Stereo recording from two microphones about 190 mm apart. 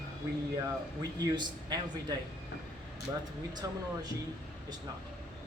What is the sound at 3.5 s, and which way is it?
Speech, 20° right (ahead or behind).